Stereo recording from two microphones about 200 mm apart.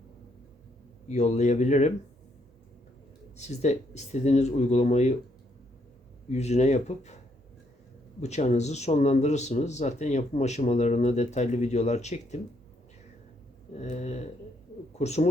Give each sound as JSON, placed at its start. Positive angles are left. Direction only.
{"t": 1.0, "sound": "speech", "side_deg": 35}
{"t": 3.3, "sound": "speech", "side_deg": 35}
{"t": 6.2, "sound": "speech", "side_deg": 35}
{"t": 8.2, "sound": "speech", "side_deg": 35}
{"t": 13.7, "sound": "speech", "side_deg": 35}